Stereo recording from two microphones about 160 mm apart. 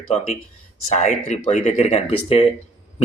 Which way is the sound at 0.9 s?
45° left (ahead or behind).